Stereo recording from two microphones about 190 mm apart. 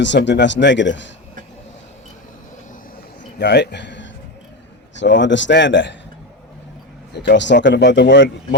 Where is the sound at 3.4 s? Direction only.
60° left (ahead or behind).